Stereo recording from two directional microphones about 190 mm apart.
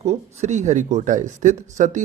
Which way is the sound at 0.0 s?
35° right (ahead or behind).